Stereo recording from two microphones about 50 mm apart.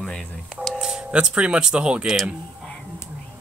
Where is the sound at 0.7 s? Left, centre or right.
Centre.